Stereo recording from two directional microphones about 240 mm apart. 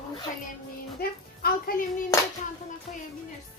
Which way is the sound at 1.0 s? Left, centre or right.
Left.